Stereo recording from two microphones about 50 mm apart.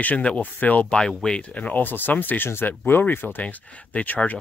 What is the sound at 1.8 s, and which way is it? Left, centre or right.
Speech, left.